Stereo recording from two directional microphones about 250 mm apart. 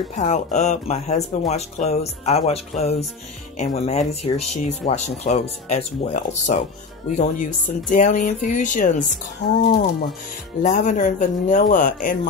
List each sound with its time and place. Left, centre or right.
0.2 s speech: left
7.9 s a man's voice: left